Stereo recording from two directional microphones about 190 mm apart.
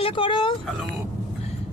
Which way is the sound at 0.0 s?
25° left (ahead or behind).